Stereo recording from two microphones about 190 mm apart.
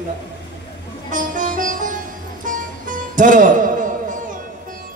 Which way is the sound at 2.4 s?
45° right (ahead or behind).